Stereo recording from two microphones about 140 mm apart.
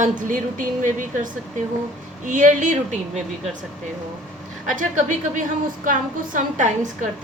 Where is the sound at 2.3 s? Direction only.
65° right (ahead or behind).